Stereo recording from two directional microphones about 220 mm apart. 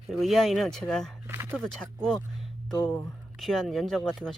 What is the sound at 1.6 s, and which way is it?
Speech, 5° left (ahead or behind).